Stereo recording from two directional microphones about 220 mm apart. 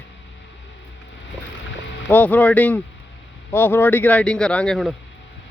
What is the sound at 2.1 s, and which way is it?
Speech, 5° left (ahead or behind).